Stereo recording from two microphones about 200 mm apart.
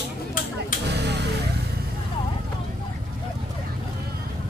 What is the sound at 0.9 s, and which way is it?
Vehicle, 60° right (ahead or behind).